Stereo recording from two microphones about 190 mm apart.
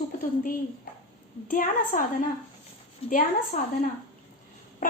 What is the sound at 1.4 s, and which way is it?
Speech, 45° left (ahead or behind).